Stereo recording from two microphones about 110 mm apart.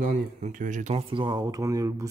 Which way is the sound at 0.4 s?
80° right.